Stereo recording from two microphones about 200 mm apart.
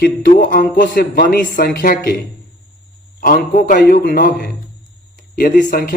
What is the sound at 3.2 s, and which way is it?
A man's voice, 45° left (ahead or behind).